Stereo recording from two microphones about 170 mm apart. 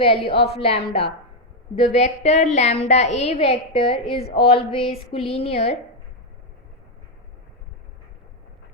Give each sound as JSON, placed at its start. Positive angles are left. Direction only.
{"t": 0.0, "sound": "a woman's voice", "side_deg": 35}